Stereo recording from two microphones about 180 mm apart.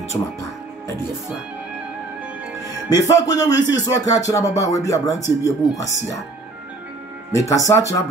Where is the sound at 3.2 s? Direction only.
20° left (ahead or behind).